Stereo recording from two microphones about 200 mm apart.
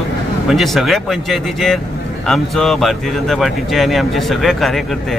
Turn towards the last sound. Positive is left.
turn(degrees=0)  # may be behind; listen again after turning